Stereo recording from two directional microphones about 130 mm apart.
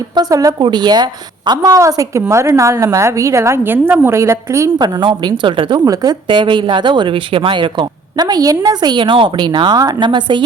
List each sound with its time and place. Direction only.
0.2 s a woman's voice: 25° right (ahead or behind)
4.8 s speech: 35° right (ahead or behind)
5.8 s speech: 30° right (ahead or behind)